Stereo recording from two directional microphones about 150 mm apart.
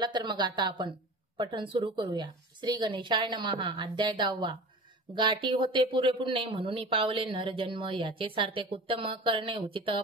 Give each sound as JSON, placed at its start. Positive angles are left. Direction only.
{"t": 0.0, "sound": "speech", "side_deg": -30}